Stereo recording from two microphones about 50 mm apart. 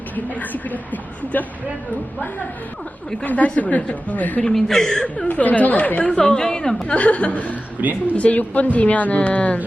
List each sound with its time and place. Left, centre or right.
0.3 s speech: left
3.2 s a woman's voice: left
4.4 s speech: centre
5.3 s speech: left
6.1 s a woman's voice: centre
6.8 s a woman's voice: left
7.8 s a woman's voice: right
8.1 s a woman's voice: left